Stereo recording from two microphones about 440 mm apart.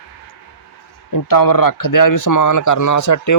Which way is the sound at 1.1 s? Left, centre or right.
Left.